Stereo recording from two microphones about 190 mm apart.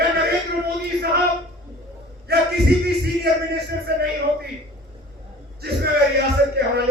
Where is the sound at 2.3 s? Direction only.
55° right (ahead or behind).